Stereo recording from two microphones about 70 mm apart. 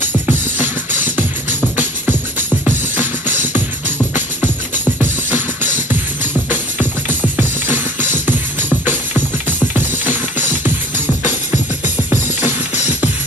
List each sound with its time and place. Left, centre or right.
0.3 s music: right
3.0 s music: right
5.0 s music: right
7.3 s music: right
9.8 s music: right
11.8 s music: right